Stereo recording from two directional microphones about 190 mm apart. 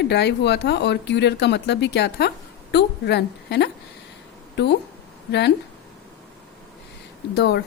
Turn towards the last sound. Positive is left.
turn(degrees=60)  # may be behind; listen again after turning